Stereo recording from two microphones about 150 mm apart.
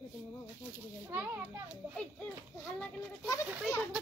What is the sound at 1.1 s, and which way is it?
Children playing, 15° right (ahead or behind).